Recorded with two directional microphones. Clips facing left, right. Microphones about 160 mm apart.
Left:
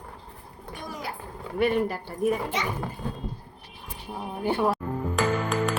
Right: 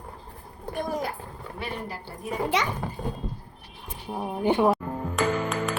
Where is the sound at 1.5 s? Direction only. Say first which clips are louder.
Left 11 dB; 55° left (ahead or behind).